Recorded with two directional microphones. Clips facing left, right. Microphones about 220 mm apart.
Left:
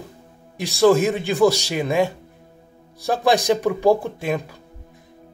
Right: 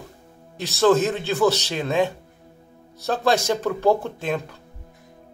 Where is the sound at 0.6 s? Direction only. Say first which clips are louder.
Left 2 dB; 10° left (ahead or behind).